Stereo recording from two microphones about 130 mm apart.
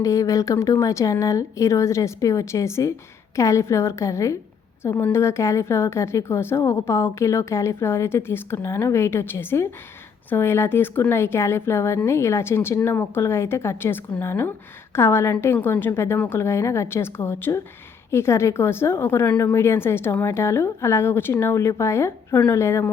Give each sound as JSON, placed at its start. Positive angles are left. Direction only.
{"t": 0.0, "sound": "speech", "side_deg": 25}